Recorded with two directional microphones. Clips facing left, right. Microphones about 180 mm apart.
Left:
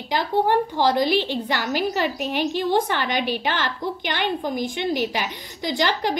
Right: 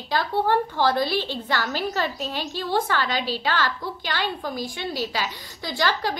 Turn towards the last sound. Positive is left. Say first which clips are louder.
# left 3 dB
turn(degrees=20)  # may be behind; listen again after turning